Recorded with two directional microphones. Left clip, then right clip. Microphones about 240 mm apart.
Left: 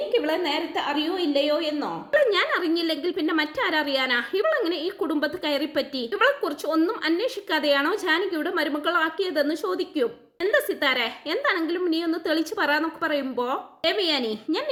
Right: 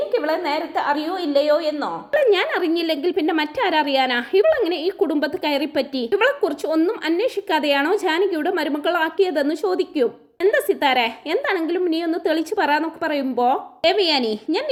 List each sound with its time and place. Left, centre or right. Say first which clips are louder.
0.1 s a woman's voice: right 3 dB; centre